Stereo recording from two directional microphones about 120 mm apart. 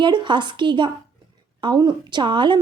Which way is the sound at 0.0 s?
40° right (ahead or behind).